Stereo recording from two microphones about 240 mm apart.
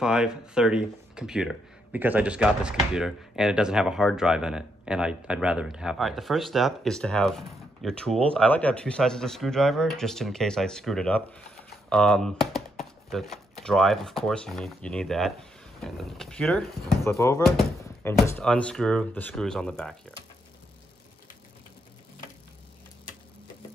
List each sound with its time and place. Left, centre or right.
0.0 s speech: centre